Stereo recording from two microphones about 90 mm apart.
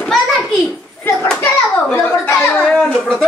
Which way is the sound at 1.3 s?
15° left (ahead or behind).